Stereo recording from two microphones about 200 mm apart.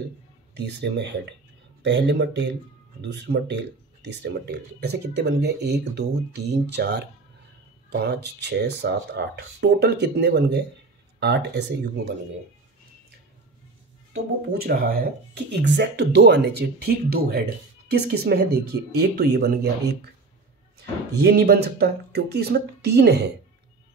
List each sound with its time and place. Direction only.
0.6 s speech: 55° right (ahead or behind)
14.5 s speech: 50° right (ahead or behind)
15.6 s speech: 60° right (ahead or behind)
21.1 s speech: 55° right (ahead or behind)